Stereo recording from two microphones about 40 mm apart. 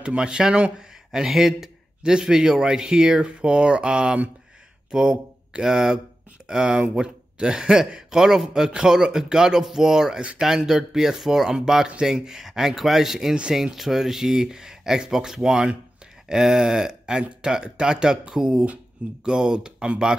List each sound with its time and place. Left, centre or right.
0.0 s a man's voice: right
0.7 s a man's voice: centre
13.3 s a man's voice: right
13.6 s speech: centre
16.3 s a sound: centre
17.2 s a man's voice: right